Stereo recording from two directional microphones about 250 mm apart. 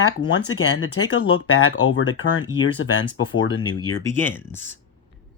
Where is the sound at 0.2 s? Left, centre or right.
Left.